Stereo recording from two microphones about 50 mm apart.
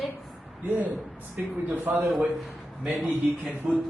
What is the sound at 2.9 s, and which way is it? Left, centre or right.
Speech, centre.